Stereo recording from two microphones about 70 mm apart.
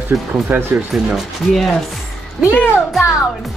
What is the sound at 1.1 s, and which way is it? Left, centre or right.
Speech, centre.